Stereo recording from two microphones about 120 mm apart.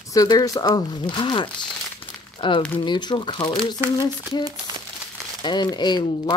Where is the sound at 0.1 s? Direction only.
30° left (ahead or behind).